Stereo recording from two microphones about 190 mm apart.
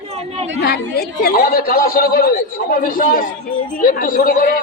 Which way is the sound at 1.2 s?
55° left (ahead or behind).